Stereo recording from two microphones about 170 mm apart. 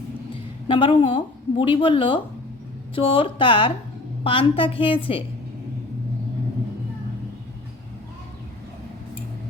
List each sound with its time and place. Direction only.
0.7 s speech: 30° left (ahead or behind)